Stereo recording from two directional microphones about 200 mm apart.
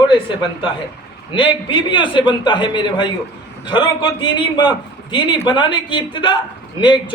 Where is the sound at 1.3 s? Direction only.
25° left (ahead or behind).